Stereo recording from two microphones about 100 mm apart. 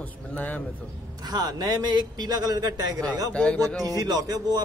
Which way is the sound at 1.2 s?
45° right (ahead or behind).